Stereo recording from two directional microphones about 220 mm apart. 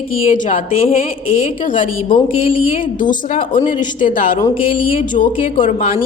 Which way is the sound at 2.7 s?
35° left (ahead or behind).